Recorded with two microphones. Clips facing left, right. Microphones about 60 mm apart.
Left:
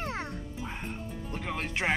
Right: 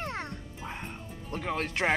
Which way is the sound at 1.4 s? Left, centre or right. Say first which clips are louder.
Right 3 dB; right.